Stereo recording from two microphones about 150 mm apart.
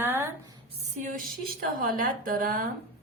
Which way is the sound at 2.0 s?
65° right (ahead or behind).